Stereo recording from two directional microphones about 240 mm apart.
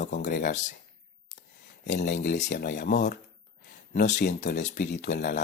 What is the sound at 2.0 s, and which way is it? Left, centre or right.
Speech, left.